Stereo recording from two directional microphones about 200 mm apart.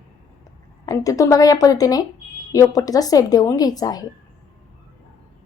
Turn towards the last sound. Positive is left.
turn(degrees=20)  # may be behind; listen again after turning